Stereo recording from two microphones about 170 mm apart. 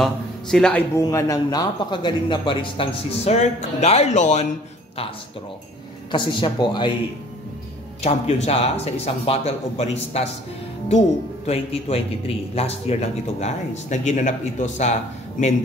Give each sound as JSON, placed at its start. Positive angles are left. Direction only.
{"t": 0.0, "sound": "a man's voice", "side_deg": 5}
{"t": 0.9, "sound": "speech", "side_deg": 15}
{"t": 6.1, "sound": "speech", "side_deg": 30}
{"t": 8.0, "sound": "a man's voice", "side_deg": 40}
{"t": 11.4, "sound": "a man's voice", "side_deg": 35}